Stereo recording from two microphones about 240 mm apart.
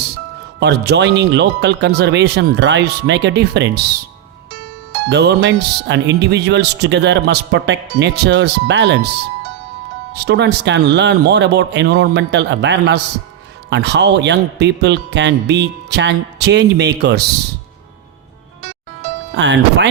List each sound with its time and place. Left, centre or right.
0.6 s speech: right
5.0 s speech: right
10.1 s speech: right
19.4 s speech: right